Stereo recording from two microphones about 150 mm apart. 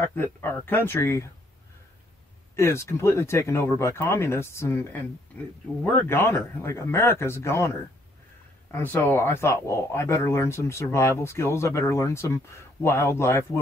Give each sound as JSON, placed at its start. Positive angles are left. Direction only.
{"t": 0.0, "sound": "speech", "side_deg": 15}
{"t": 2.5, "sound": "speech", "side_deg": 20}
{"t": 5.9, "sound": "speech", "side_deg": 15}
{"t": 8.7, "sound": "speech", "side_deg": 15}